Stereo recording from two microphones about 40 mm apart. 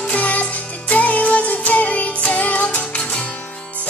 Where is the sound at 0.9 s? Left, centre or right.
Left.